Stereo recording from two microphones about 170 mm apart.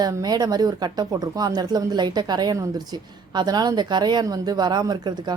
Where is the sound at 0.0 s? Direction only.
20° right (ahead or behind).